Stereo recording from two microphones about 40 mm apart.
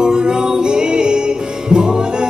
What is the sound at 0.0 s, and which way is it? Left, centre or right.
Music, centre.